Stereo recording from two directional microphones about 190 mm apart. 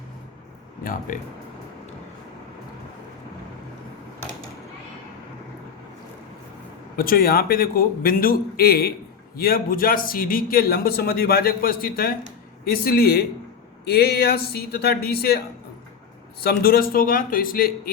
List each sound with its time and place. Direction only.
0.9 s a man's voice: 45° left (ahead or behind)
6.9 s a man's voice: 50° left (ahead or behind)